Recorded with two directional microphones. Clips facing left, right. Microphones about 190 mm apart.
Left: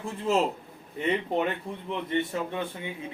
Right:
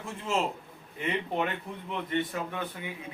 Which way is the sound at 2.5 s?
25° left (ahead or behind).